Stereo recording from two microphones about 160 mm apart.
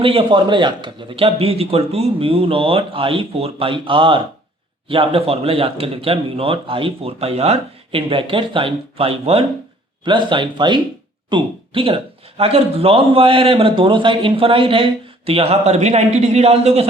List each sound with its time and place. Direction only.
0.0 s a man's voice: 35° right (ahead or behind)